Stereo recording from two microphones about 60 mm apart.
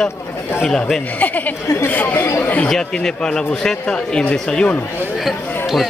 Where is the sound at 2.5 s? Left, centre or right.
Centre.